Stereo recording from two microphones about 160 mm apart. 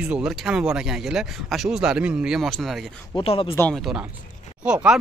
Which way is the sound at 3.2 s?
35° left (ahead or behind).